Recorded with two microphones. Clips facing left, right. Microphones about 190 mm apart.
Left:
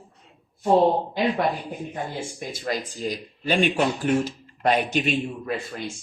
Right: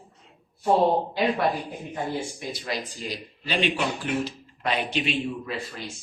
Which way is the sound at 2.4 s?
45° left (ahead or behind).